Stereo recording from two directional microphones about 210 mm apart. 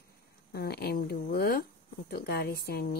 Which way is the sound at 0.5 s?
50° left (ahead or behind).